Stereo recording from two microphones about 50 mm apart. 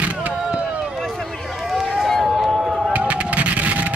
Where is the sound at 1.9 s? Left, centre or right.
Centre.